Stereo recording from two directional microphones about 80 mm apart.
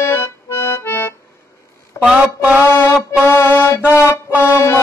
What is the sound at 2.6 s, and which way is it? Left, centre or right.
Music, left.